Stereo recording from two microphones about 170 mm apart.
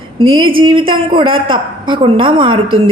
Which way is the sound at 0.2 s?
30° right (ahead or behind).